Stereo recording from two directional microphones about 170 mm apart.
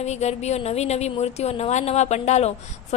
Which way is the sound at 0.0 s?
40° left (ahead or behind).